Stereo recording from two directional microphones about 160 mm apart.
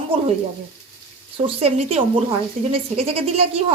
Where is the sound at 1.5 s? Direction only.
40° right (ahead or behind).